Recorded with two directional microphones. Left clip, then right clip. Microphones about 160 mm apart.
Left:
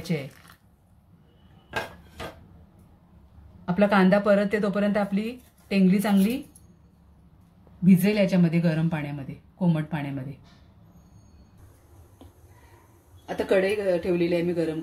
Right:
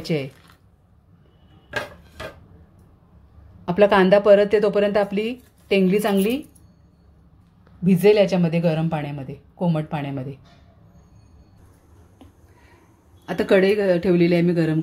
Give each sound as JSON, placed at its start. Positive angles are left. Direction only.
{"t": 0.1, "sound": "speech", "side_deg": -40}
{"t": 3.6, "sound": "speech", "side_deg": -35}
{"t": 7.8, "sound": "speech", "side_deg": -30}
{"t": 13.2, "sound": "speech", "side_deg": -80}